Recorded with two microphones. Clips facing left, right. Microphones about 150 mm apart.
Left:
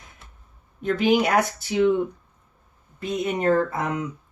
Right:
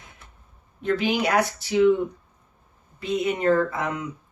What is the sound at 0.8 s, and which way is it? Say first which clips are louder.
Speech: left 3 dB; 50° left (ahead or behind).